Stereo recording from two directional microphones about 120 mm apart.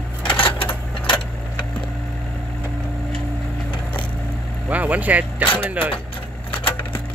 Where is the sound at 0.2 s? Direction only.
45° left (ahead or behind).